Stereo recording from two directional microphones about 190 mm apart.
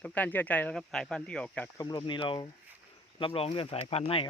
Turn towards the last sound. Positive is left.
turn(degrees=30)  # may be behind; listen again after turning